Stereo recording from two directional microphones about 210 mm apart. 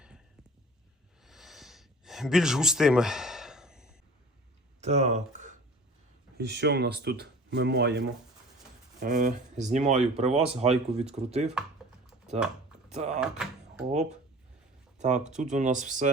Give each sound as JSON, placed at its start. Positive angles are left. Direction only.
{"t": 1.2, "sound": "a sound", "side_deg": 0}
{"t": 4.8, "sound": "speech", "side_deg": -30}
{"t": 6.3, "sound": "speech", "side_deg": -50}
{"t": 9.0, "sound": "speech", "side_deg": -40}
{"t": 12.9, "sound": "speech", "side_deg": -35}
{"t": 13.1, "sound": "speech", "side_deg": -5}
{"t": 15.0, "sound": "speech", "side_deg": -35}